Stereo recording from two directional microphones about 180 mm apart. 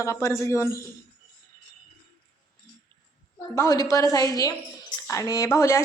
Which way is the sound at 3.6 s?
15° left (ahead or behind).